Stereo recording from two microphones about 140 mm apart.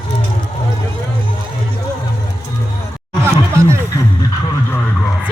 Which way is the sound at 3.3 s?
20° right (ahead or behind).